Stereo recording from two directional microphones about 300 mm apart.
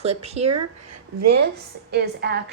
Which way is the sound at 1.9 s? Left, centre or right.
Right.